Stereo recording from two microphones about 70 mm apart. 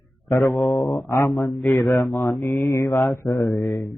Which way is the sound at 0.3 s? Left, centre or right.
Left.